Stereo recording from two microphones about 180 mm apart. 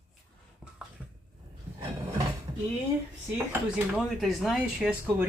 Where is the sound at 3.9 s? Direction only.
Centre (ahead or behind).